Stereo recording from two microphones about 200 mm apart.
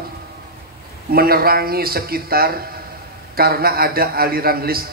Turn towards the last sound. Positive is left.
turn(degrees=-50)  # may be behind; listen again after turning